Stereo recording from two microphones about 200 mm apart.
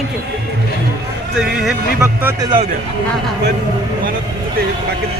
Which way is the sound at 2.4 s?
25° right (ahead or behind).